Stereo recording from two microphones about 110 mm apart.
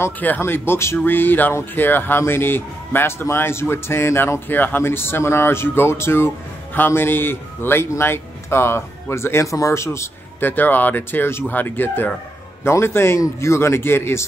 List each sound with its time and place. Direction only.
0.0 s speech: 20° left (ahead or behind)